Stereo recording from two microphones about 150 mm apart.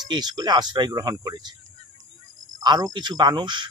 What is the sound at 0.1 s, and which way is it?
Speech, 30° right (ahead or behind).